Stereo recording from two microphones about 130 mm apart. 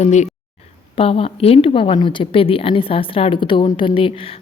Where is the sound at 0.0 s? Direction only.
65° left (ahead or behind).